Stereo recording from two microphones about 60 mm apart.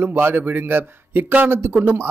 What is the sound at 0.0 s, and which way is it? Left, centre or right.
A man's voice, right.